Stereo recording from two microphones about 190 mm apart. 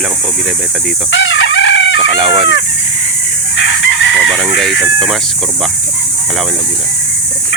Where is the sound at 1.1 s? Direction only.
80° left.